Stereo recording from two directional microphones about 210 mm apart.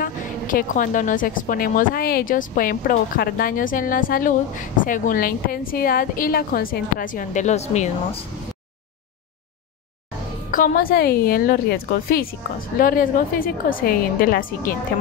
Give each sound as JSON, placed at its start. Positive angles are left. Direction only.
{"t": 0.0, "sound": "a woman's voice", "side_deg": 40}
{"t": 10.5, "sound": "a woman's voice", "side_deg": 40}